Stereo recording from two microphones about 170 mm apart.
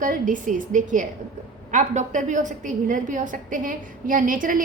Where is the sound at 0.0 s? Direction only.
50° right (ahead or behind).